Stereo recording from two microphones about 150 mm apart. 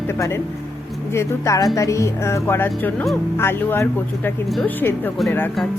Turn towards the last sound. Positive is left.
turn(degrees=10)  # may be behind; listen again after turning